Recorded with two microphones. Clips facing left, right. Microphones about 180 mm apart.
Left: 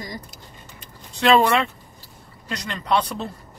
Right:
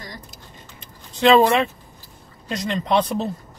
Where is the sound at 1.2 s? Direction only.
20° right (ahead or behind).